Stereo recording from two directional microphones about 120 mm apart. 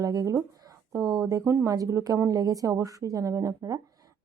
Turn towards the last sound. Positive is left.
turn(degrees=-25)  # may be behind; listen again after turning